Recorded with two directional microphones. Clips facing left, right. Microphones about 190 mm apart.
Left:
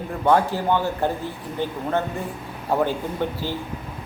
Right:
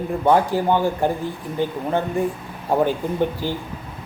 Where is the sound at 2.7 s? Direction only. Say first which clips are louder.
Right 3 dB; 15° right (ahead or behind).